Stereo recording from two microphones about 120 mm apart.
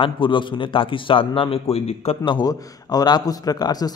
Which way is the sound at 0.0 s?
45° left (ahead or behind).